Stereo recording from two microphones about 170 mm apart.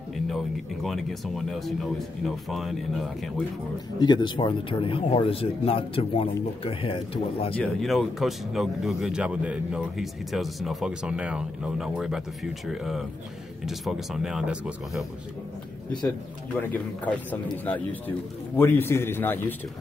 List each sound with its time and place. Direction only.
0.8 s speech: centre (ahead or behind)
4.0 s speech: 25° left (ahead or behind)
7.5 s speech: 5° left (ahead or behind)
16.5 s speech: 10° left (ahead or behind)